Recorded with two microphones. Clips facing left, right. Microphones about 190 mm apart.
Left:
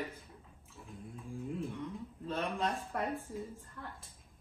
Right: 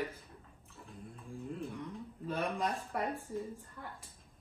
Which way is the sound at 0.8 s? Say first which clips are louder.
Left 2 dB; centre (ahead or behind).